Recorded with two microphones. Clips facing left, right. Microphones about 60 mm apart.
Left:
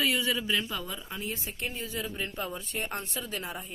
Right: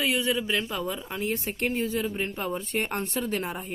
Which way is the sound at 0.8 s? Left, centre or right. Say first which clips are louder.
Right 7 dB; right.